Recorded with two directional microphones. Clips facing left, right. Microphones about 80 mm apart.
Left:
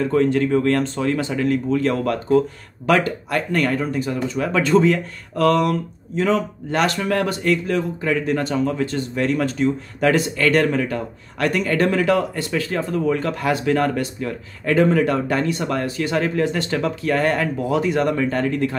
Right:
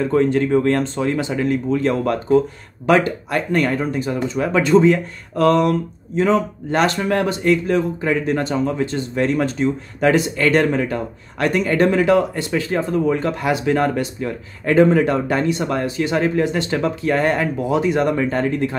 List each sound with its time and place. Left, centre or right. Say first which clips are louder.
0.0 s speech: right 1 dB; right